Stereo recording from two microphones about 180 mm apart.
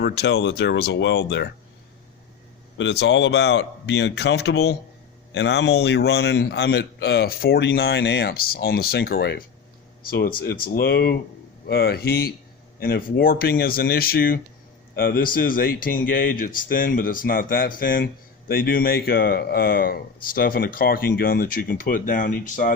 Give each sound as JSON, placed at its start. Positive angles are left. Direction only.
{"t": 0.0, "sound": "speech", "side_deg": 65}
{"t": 2.7, "sound": "a man's voice", "side_deg": 80}